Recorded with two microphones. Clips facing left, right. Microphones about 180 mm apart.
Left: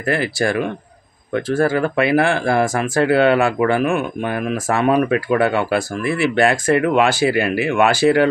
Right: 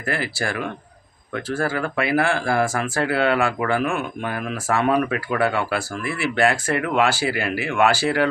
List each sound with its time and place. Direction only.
0.0 s speech: 20° left (ahead or behind)